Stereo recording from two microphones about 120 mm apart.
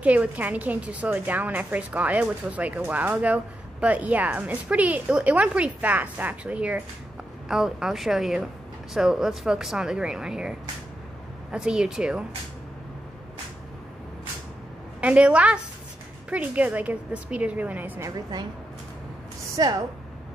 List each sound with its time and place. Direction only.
0.0 s a woman's voice: 10° right (ahead or behind)
11.5 s speech: 5° right (ahead or behind)
15.0 s a woman's voice: 10° right (ahead or behind)
18.0 s a woman's voice: 35° right (ahead or behind)
19.5 s a woman's voice: 30° right (ahead or behind)